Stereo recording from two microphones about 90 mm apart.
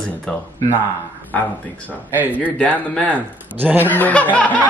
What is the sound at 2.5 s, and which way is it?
Speech, 20° left (ahead or behind).